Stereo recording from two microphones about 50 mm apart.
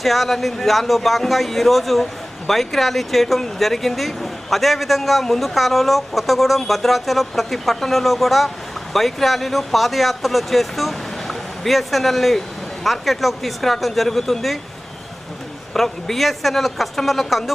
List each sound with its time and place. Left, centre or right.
0.0 s speech: centre
15.7 s speech: centre